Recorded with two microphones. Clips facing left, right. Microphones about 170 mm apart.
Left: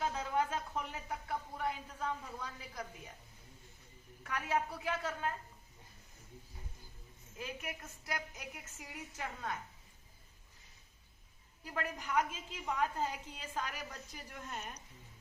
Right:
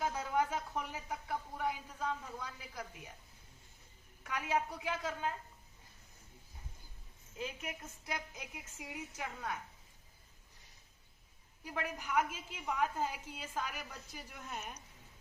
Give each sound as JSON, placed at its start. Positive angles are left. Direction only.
{"t": 0.0, "sound": "a sound", "side_deg": -10}
{"t": 2.4, "sound": "a woman's voice", "side_deg": -10}
{"t": 4.2, "sound": "a woman's voice", "side_deg": -15}
{"t": 7.3, "sound": "a woman's voice", "side_deg": -25}
{"t": 11.6, "sound": "a woman's voice", "side_deg": -15}